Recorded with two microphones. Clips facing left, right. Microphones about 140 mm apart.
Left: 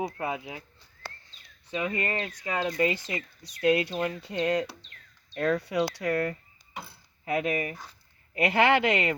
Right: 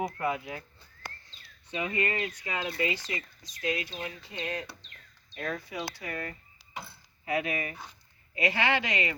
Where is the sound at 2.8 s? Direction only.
45° left (ahead or behind); by 6.4 s 75° left (ahead or behind).